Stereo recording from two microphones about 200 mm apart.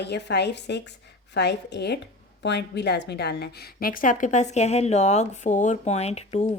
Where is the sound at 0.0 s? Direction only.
55° left (ahead or behind).